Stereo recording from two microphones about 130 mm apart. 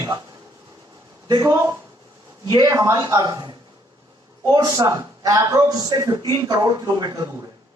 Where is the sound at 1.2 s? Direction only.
30° right (ahead or behind).